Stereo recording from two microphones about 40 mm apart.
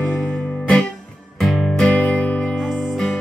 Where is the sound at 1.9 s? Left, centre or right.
Left.